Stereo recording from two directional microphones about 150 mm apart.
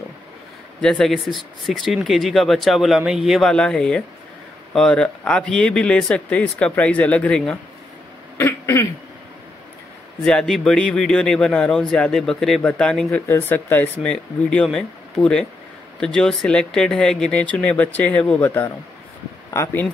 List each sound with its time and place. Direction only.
0.7 s a man's voice: 5° left (ahead or behind)
8.4 s throat clearing: 15° left (ahead or behind)
10.2 s a man's voice: 5° left (ahead or behind)